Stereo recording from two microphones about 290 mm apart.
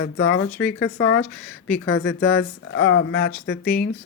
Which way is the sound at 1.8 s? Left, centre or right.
Left.